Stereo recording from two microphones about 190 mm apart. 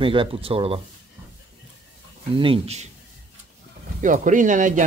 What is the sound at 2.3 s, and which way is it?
Speech, 30° right (ahead or behind).